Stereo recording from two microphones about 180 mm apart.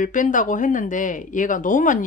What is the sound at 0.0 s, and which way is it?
Speech, 45° left (ahead or behind).